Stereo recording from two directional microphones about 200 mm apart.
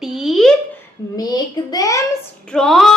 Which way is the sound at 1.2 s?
20° left (ahead or behind).